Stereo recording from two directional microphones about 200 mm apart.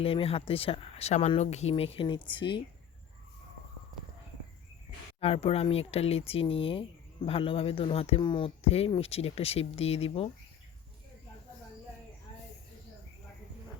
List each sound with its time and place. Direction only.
0.0 s speech: 30° left (ahead or behind)
5.2 s speech: 30° left (ahead or behind)